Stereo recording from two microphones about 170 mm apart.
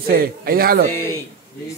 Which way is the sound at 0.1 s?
60° right (ahead or behind).